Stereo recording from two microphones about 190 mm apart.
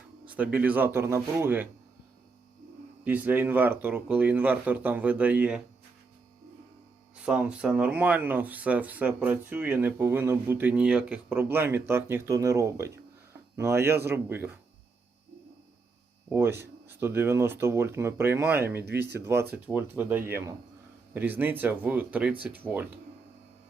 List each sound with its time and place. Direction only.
0.3 s speech: 10° right (ahead or behind)
3.0 s speech: 10° right (ahead or behind)
7.3 s speech: 5° right (ahead or behind)
16.3 s speech: 15° right (ahead or behind)
18.8 s speech: 60° right (ahead or behind)
19.2 s speech: 15° right (ahead or behind)